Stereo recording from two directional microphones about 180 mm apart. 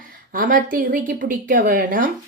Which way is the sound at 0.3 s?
50° right (ahead or behind).